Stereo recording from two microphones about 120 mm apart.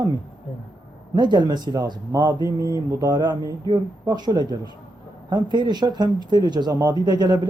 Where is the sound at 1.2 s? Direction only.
40° right (ahead or behind).